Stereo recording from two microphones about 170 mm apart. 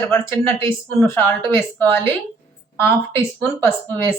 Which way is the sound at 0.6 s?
15° left (ahead or behind).